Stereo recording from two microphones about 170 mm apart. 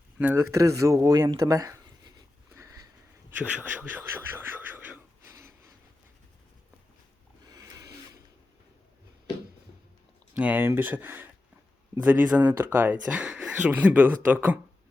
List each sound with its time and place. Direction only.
0.2 s speech: 10° right (ahead or behind)
7.4 s a sound: 20° right (ahead or behind)
10.3 s speech: 10° right (ahead or behind)